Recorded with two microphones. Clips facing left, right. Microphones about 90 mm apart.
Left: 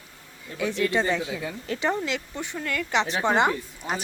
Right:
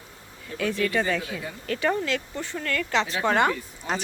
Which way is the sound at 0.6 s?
20° left (ahead or behind).